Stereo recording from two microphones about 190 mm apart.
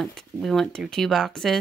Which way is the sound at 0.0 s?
Centre (ahead or behind).